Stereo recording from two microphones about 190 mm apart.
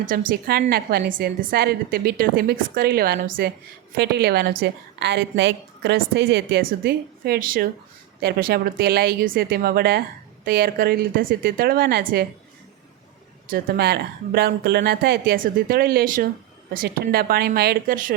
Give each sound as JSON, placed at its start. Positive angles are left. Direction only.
{"t": 0.0, "sound": "a woman's voice", "side_deg": -45}
{"t": 13.5, "sound": "speech", "side_deg": -55}